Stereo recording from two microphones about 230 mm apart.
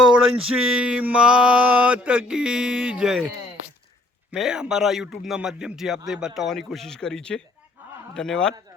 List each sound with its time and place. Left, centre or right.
0.2 s a sound: right
0.8 s mantra: centre
4.3 s mantra: centre